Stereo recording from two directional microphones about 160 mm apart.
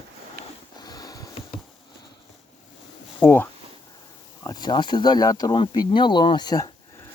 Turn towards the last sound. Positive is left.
turn(degrees=25)  # may be behind; listen again after turning